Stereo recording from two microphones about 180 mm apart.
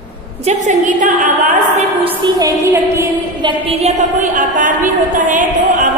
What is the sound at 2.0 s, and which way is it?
A woman's voice, 25° right (ahead or behind).